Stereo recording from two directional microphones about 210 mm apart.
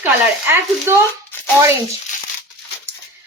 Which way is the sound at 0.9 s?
10° right (ahead or behind).